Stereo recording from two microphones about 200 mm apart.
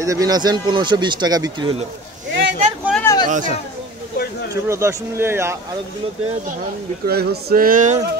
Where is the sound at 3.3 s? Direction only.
40° right (ahead or behind).